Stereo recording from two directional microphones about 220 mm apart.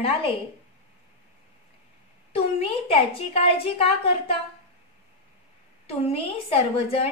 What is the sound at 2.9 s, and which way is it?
A woman's voice, 25° left (ahead or behind).